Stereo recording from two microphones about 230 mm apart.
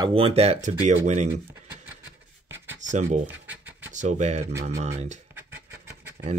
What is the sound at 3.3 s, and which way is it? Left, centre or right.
Scratch, centre.